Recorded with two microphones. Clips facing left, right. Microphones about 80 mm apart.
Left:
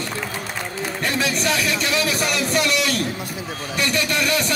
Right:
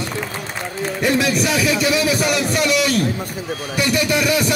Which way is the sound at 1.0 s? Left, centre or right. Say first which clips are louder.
Right 5 dB; centre.